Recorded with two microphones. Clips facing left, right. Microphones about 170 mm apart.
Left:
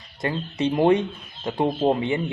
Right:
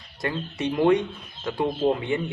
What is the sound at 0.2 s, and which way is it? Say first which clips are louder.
Speech: left 3 dB; 25° left (ahead or behind).